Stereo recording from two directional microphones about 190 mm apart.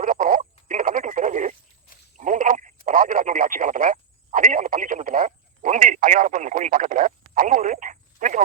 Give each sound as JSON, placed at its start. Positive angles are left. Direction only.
{"t": 0.0, "sound": "radio", "side_deg": -45}
{"t": 2.1, "sound": "a sound", "side_deg": -40}
{"t": 2.8, "sound": "radio", "side_deg": -45}